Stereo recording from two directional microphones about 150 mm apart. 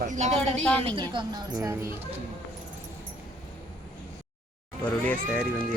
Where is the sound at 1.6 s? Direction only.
20° right (ahead or behind).